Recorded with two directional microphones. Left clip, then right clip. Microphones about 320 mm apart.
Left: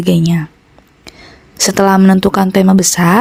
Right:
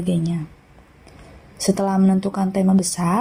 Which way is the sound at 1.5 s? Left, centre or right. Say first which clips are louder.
Left 11 dB; left.